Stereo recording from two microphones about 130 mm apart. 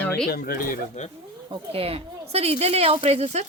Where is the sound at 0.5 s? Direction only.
75° left (ahead or behind).